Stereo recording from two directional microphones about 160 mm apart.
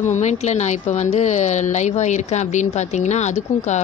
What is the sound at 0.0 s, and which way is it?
A woman's voice, 45° left (ahead or behind).